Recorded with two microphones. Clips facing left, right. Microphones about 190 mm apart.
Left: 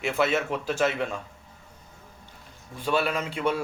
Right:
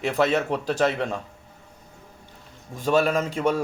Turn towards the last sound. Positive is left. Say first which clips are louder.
# right 4 dB
turn(degrees=-40)  # may be behind; listen again after turning